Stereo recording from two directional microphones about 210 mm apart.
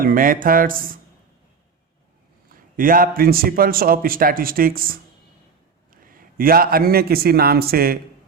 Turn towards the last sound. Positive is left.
turn(degrees=-45)  # may be behind; listen again after turning